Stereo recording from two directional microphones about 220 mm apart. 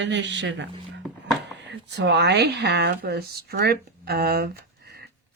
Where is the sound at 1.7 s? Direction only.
50° right (ahead or behind).